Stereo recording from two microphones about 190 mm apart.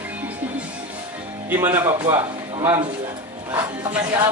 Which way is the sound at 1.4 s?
15° right (ahead or behind).